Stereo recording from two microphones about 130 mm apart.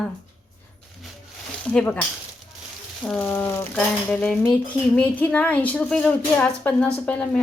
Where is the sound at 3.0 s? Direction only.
5° left (ahead or behind).